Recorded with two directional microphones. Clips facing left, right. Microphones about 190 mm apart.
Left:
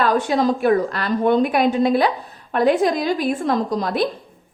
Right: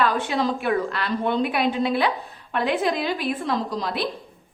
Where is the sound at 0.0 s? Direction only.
40° left (ahead or behind).